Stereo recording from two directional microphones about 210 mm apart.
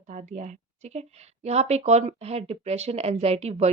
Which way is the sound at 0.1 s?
35° right (ahead or behind).